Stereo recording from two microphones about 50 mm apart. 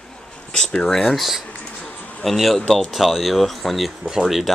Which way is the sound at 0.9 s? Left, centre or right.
Centre.